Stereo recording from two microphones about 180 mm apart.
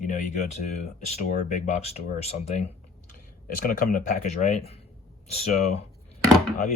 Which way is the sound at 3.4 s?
50° left (ahead or behind).